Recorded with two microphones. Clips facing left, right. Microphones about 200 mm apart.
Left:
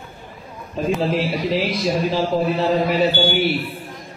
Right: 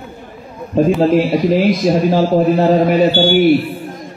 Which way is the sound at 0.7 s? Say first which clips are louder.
Right 9 dB; 50° right (ahead or behind).